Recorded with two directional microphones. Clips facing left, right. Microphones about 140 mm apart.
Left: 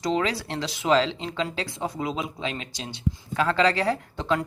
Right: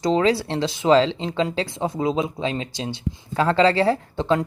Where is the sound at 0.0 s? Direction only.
30° right (ahead or behind).